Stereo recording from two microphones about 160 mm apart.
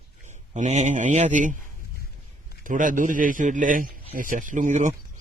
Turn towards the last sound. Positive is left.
turn(degrees=-50)  # may be behind; listen again after turning